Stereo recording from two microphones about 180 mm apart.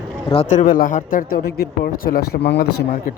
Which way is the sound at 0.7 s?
50° left (ahead or behind).